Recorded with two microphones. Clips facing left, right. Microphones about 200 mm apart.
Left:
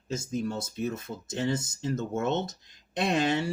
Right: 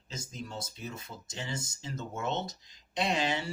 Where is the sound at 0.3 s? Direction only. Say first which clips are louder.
Left 10 dB; 55° left (ahead or behind).